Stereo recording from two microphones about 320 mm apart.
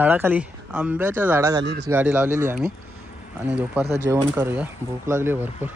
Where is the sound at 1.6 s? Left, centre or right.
Right.